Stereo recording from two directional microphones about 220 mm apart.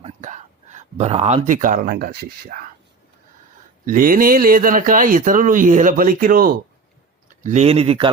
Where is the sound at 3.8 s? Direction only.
40° right (ahead or behind).